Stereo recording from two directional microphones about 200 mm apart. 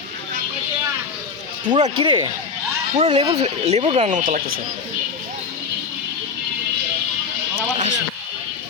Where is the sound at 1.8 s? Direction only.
25° right (ahead or behind).